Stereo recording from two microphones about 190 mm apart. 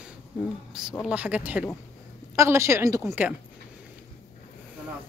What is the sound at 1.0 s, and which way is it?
A woman's voice, 10° right (ahead or behind).